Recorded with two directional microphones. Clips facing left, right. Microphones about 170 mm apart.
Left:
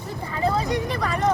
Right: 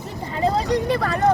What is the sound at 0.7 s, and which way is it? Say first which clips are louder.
Speech: right 4 dB; 35° right (ahead or behind).